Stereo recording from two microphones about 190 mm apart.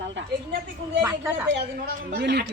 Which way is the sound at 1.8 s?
55° right (ahead or behind).